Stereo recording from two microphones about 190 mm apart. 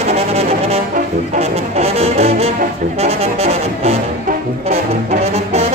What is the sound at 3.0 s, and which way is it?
Brass instrument, 35° right (ahead or behind).